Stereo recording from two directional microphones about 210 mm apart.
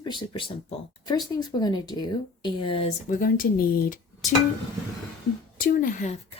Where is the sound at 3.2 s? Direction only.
40° left (ahead or behind).